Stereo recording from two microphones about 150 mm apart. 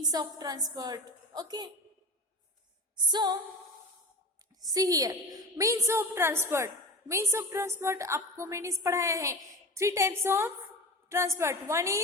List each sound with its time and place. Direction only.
0.0 s a woman's voice: 25° right (ahead or behind)
2.9 s music: 30° right (ahead or behind)
4.6 s a woman's voice: 25° right (ahead or behind)